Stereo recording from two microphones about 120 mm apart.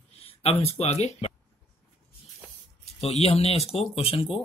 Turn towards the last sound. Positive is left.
turn(degrees=50)  # may be behind; listen again after turning